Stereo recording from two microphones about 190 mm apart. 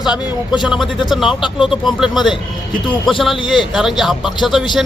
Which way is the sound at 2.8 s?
25° left (ahead or behind).